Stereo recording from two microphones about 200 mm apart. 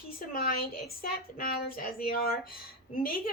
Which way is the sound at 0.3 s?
50° left (ahead or behind).